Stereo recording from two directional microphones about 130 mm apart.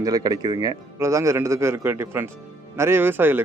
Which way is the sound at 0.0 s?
30° right (ahead or behind).